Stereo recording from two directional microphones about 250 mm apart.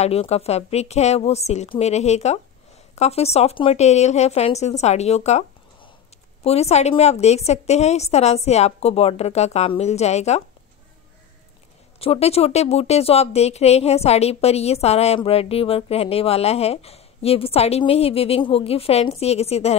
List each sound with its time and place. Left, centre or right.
0.0 s speech: left
12.0 s speech: left